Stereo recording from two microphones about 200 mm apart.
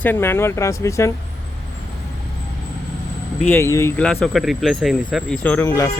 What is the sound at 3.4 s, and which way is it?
Speech, 10° left (ahead or behind).